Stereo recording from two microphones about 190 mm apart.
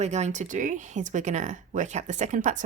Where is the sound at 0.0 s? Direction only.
35° right (ahead or behind).